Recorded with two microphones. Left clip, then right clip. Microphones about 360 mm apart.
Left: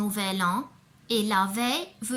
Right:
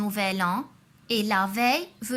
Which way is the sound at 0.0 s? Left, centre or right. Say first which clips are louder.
Right 1 dB; centre.